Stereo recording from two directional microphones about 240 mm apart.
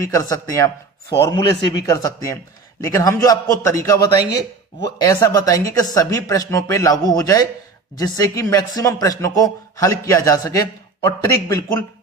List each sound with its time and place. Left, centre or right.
0.0 s speech: centre